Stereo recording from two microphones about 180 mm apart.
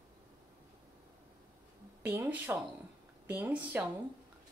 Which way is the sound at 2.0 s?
10° right (ahead or behind).